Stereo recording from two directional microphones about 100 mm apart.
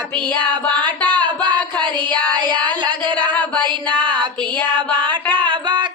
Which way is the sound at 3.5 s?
50° right (ahead or behind).